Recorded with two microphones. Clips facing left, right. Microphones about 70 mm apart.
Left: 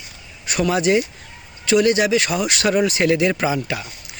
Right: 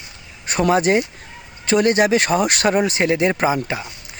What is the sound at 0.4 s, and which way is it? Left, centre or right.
Speech, right.